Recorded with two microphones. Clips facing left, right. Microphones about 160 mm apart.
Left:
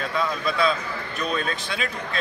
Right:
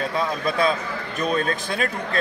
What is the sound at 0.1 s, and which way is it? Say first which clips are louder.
Speech: right 1 dB; 45° right (ahead or behind).